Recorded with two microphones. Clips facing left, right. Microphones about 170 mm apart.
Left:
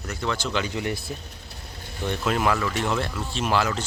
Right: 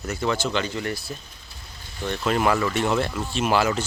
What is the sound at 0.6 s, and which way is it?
Speech, 15° left (ahead or behind).